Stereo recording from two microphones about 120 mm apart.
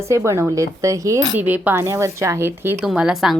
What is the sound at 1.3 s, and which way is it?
A woman's voice, 15° right (ahead or behind).